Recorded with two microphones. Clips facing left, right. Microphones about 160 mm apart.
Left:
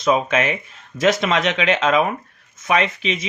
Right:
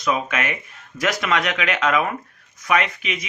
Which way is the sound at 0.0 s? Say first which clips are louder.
Left 5 dB; 30° left (ahead or behind).